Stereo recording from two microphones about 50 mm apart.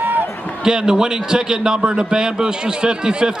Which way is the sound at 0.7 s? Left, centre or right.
Centre.